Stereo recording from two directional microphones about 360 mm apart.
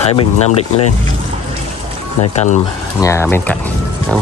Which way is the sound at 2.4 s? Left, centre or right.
Centre.